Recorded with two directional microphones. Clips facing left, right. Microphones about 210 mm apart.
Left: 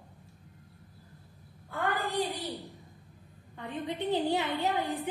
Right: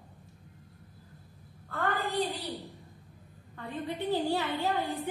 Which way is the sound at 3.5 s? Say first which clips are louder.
Even; 20° left (ahead or behind).